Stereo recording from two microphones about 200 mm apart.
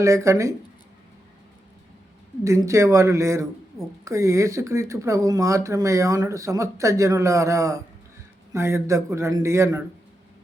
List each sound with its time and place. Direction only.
0.0 s speech: 15° right (ahead or behind)
2.4 s speech: 15° right (ahead or behind)